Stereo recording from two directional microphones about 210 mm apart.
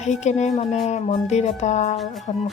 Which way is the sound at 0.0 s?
35° left (ahead or behind).